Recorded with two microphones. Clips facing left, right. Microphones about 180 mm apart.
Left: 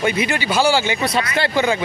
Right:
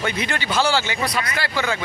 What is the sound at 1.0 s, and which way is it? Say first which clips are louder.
Speech: left 5 dB; 25° left (ahead or behind).